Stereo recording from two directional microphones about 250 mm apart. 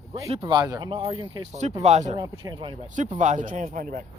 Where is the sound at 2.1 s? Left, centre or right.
Centre.